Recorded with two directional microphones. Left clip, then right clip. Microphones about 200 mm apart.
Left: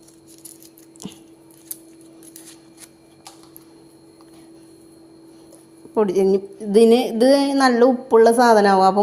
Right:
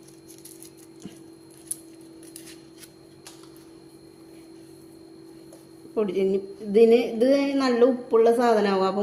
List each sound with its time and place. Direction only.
5.9 s a woman's voice: 35° left (ahead or behind)